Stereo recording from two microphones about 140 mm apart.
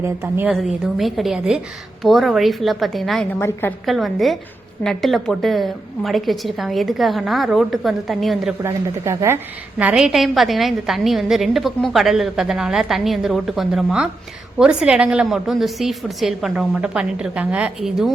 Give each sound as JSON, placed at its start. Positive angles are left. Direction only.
{"t": 0.0, "sound": "a woman's voice", "side_deg": -15}
{"t": 0.5, "sound": "a woman's voice", "side_deg": 0}
{"t": 3.3, "sound": "a woman's voice", "side_deg": 15}
{"t": 3.8, "sound": "a woman's voice", "side_deg": 0}
{"t": 8.6, "sound": "a woman's voice", "side_deg": -20}